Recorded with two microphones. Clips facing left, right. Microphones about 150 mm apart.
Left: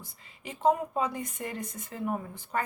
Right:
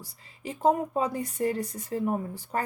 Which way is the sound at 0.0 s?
35° right (ahead or behind).